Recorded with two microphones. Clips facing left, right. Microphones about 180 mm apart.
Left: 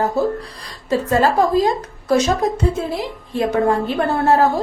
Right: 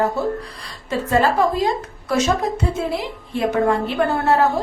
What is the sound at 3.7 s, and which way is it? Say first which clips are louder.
Speech: left 1 dB; 35° left (ahead or behind).